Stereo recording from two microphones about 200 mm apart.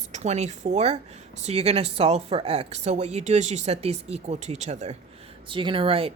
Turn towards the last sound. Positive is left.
turn(degrees=-30)  # may be behind; listen again after turning